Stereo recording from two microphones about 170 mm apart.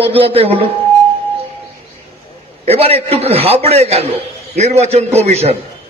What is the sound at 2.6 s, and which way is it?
A man's voice, 35° right (ahead or behind).